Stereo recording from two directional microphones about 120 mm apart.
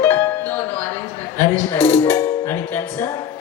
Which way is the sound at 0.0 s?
15° left (ahead or behind).